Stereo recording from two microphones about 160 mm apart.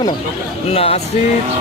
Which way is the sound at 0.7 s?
35° left (ahead or behind).